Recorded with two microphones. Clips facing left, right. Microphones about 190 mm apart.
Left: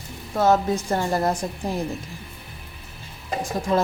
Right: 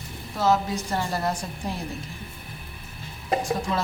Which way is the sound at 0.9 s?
45° left (ahead or behind).